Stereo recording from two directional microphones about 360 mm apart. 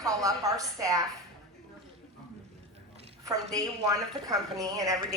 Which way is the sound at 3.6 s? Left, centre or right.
Centre.